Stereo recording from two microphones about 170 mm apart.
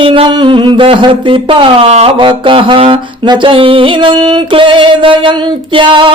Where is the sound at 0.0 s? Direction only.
30° right (ahead or behind).